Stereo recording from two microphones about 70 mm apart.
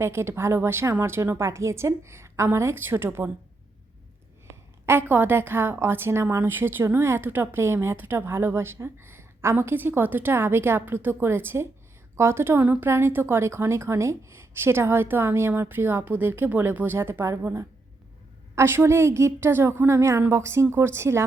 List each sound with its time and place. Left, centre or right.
0.0 s a woman's voice: right
4.9 s a woman's voice: right
12.6 s a woman's voice: right